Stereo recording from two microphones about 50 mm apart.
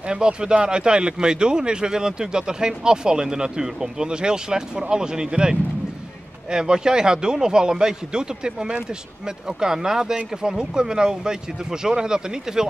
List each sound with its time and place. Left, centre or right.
0.1 s speech: centre